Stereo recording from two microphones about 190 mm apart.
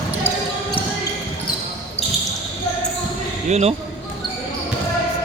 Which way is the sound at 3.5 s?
35° right (ahead or behind).